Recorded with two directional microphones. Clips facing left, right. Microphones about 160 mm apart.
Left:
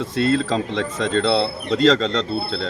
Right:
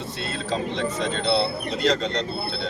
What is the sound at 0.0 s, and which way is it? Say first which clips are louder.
Speech: left 12 dB; 90° left.